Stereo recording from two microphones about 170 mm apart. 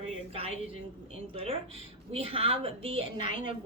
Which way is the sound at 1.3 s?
35° right (ahead or behind).